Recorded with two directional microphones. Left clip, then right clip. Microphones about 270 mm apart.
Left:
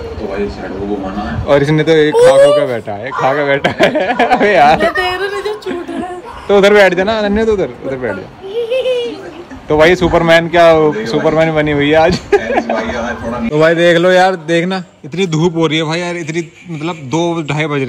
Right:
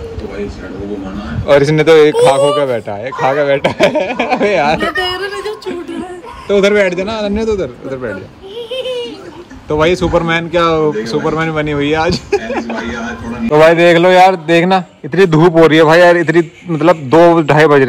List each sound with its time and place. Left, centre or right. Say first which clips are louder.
1.4 s speech: right 2 dB; centre
6.4 s speech: left 3 dB; centre
9.7 s speech: left 3 dB; centre
12.7 s a sound: left 4 dB; centre
13.6 s speech: right 3 dB; centre
15.8 s a man's voice: right 12 dB; right
16.8 s a man's voice: right 10 dB; right